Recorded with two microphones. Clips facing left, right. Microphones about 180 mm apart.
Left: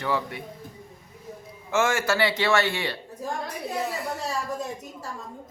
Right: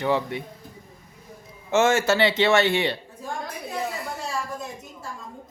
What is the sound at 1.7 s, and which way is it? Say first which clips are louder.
A man's voice: right 4 dB; 25° right (ahead or behind).